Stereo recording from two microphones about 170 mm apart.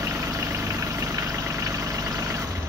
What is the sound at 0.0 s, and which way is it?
Vehicle, 20° right (ahead or behind).